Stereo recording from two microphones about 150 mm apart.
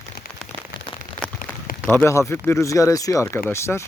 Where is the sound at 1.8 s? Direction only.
15° left (ahead or behind).